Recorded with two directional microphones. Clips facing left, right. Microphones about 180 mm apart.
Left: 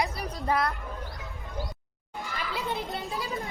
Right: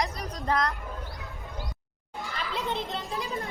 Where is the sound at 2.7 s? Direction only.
10° left (ahead or behind).